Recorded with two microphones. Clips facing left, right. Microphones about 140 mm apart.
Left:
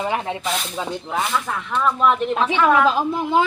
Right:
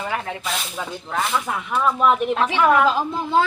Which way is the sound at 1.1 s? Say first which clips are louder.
Even; centre (ahead or behind).